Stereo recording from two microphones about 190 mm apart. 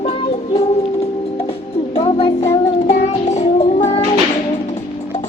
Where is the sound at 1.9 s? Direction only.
30° left (ahead or behind).